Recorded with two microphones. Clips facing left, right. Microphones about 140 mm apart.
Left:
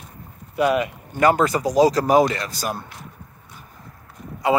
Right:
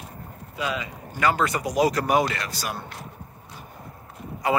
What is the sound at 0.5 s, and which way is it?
Speech, 60° left (ahead or behind).